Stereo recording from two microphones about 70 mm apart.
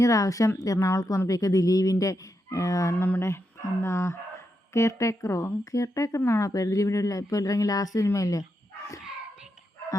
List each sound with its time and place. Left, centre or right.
0.0 s speech: left
2.9 s a sound: left
3.2 s speech: left
5.7 s speech: left